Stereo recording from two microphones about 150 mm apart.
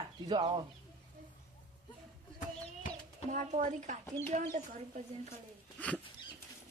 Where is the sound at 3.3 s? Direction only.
55° right (ahead or behind).